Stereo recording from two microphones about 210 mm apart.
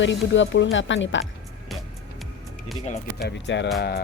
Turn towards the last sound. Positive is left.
turn(degrees=50)  # may be behind; listen again after turning